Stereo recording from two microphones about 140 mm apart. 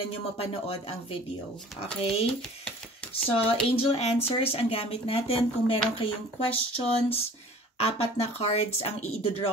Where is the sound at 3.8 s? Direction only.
45° left (ahead or behind).